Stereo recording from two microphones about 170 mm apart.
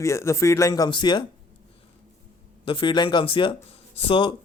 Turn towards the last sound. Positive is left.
turn(degrees=30)  # may be behind; listen again after turning